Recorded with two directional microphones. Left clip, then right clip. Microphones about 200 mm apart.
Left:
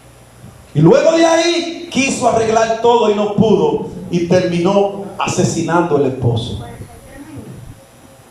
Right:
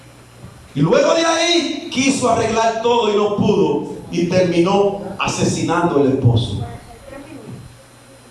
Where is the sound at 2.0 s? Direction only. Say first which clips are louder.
Left 3 dB; 35° left (ahead or behind).